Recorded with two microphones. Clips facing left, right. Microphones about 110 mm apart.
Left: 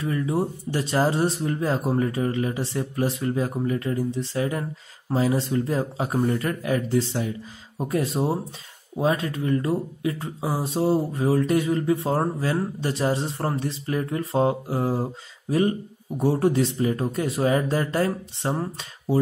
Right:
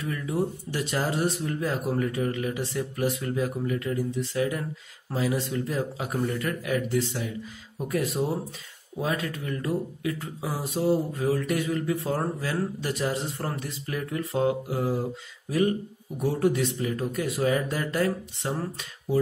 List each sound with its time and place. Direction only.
0.0 s speech: 30° left (ahead or behind)
16.2 s speech: 35° left (ahead or behind)